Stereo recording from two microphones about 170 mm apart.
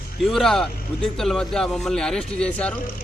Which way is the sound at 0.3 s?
Centre (ahead or behind).